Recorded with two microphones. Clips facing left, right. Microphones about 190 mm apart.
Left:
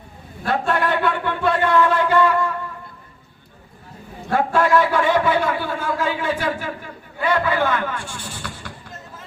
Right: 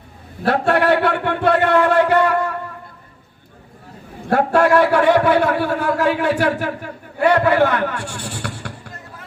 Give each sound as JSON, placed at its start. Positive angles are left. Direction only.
{"t": 0.4, "sound": "speech", "side_deg": -70}
{"t": 4.3, "sound": "a man's voice", "side_deg": -70}